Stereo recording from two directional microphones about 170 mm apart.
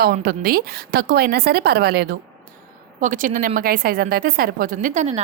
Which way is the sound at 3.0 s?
50° right (ahead or behind).